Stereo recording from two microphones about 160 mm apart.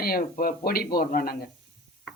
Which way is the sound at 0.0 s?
65° left (ahead or behind).